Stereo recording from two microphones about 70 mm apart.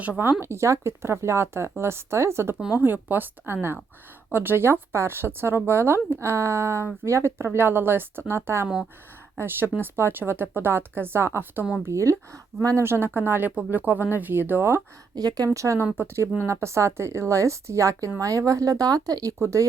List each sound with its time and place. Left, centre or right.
0.2 s speech: right
2.7 s speech: right
9.8 s speech: right
11.9 s a woman's voice: right
12.8 s speech: right
15.1 s speech: right
15.5 s a woman's voice: right
19.4 s a woman's voice: right